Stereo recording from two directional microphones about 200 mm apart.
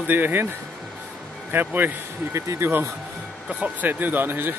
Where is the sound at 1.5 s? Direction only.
10° right (ahead or behind).